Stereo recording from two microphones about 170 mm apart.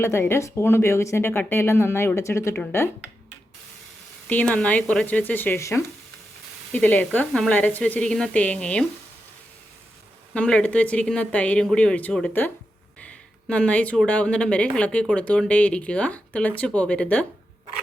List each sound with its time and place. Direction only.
0.0 s speech: 15° left (ahead or behind)
4.3 s speech: 10° left (ahead or behind)
10.3 s speech: 5° left (ahead or behind)